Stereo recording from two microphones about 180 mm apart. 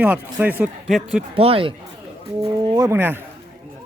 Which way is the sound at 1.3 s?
30° right (ahead or behind).